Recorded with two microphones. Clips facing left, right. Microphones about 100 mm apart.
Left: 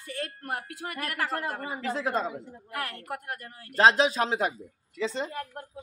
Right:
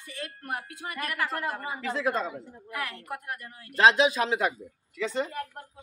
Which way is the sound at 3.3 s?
40° left (ahead or behind).